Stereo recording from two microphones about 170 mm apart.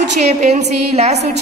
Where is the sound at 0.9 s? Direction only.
40° right (ahead or behind).